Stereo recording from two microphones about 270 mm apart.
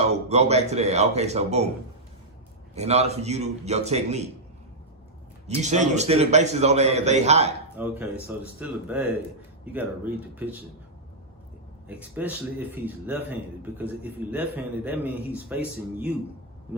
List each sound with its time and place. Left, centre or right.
0.3 s a man's voice: right
2.7 s a man's voice: right
5.6 s a man's voice: right
7.8 s speech: centre
11.9 s a man's voice: centre